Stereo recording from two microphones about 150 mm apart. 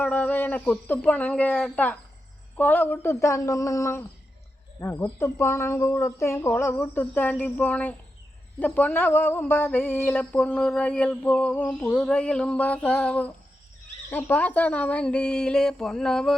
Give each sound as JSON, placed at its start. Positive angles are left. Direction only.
{"t": 0.0, "sound": "a woman's voice", "side_deg": 10}